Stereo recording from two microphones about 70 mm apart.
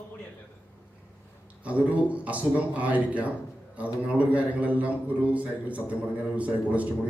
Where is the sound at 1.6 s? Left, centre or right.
Right.